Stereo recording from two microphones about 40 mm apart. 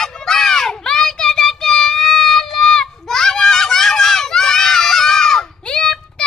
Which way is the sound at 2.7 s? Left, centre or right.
Centre.